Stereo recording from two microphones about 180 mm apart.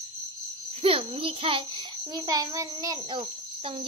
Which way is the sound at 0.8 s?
30° right (ahead or behind).